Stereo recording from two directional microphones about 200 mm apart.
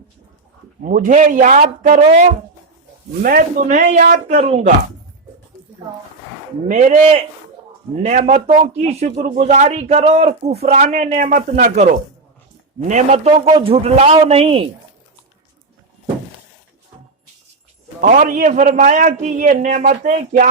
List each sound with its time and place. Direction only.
0.9 s a man's voice: 40° right (ahead or behind)
3.2 s a man's voice: 40° right (ahead or behind)
6.7 s a man's voice: 35° right (ahead or behind)
7.9 s a man's voice: 35° right (ahead or behind)
12.9 s a man's voice: 35° right (ahead or behind)
18.0 s a man's voice: 40° right (ahead or behind)